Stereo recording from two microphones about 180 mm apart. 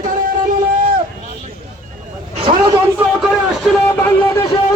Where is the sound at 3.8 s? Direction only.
15° left (ahead or behind).